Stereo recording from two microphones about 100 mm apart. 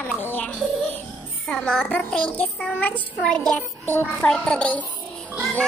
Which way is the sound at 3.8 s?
20° left (ahead or behind).